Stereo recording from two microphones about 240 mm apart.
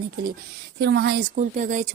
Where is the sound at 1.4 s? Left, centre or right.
Right.